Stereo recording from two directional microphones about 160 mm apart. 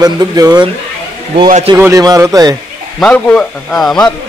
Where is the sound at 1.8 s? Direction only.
20° right (ahead or behind).